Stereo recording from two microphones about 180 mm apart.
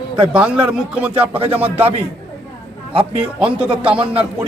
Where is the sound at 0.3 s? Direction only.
5° right (ahead or behind).